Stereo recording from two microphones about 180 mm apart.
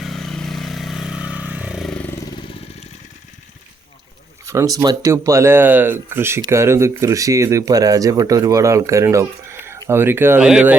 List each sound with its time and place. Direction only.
0.0 s vehicle: centre (ahead or behind)
2.2 s vehicle: 25° left (ahead or behind)
4.4 s speech: 20° right (ahead or behind)